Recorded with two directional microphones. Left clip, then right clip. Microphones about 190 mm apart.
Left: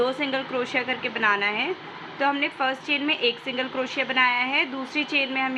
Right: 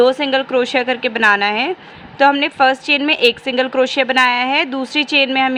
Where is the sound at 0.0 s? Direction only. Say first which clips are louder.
Right 11 dB; 55° right (ahead or behind).